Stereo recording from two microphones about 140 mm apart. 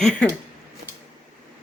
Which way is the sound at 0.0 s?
5° left (ahead or behind).